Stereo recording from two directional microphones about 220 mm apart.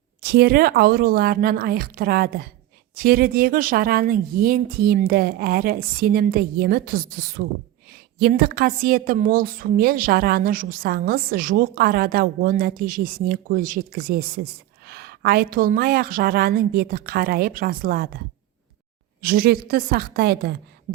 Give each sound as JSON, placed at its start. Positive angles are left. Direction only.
{"t": 0.2, "sound": "a woman's voice", "side_deg": -45}
{"t": 19.2, "sound": "speech", "side_deg": -45}